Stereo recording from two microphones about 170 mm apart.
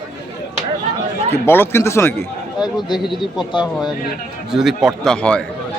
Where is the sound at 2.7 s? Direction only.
Centre (ahead or behind).